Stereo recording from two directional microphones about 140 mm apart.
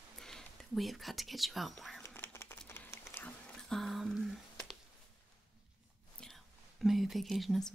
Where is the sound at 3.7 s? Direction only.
Centre (ahead or behind).